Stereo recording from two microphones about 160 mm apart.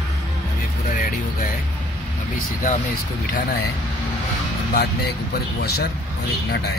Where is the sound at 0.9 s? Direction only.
60° left (ahead or behind).